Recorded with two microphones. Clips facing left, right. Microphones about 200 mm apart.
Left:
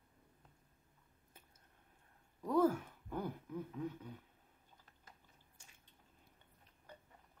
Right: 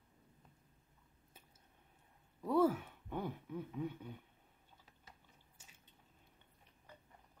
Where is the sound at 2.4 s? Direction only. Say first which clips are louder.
Even; 5° right (ahead or behind).